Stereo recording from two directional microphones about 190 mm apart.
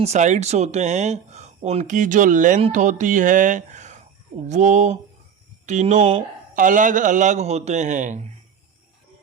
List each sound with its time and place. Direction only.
0.0 s speech: 35° right (ahead or behind)
6.5 s speech: 45° right (ahead or behind)